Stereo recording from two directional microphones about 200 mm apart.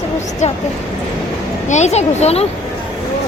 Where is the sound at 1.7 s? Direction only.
35° left (ahead or behind).